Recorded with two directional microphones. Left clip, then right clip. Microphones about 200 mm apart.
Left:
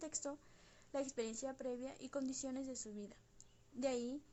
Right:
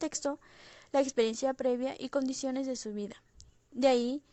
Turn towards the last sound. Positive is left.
turn(degrees=-40)  # may be behind; listen again after turning